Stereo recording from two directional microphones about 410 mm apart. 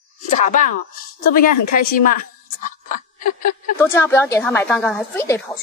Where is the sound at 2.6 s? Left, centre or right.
Centre.